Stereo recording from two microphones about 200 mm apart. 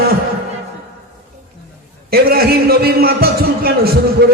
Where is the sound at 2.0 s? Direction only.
50° right (ahead or behind).